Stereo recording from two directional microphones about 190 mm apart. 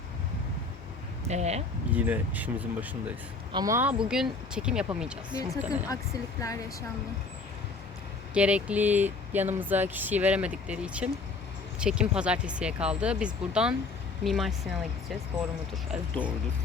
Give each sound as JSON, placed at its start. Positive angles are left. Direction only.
{"t": 1.3, "sound": "speech", "side_deg": -35}
{"t": 1.9, "sound": "speech", "side_deg": -10}
{"t": 4.1, "sound": "speech", "side_deg": -5}
{"t": 6.4, "sound": "speech", "side_deg": 15}
{"t": 8.3, "sound": "speech", "side_deg": -5}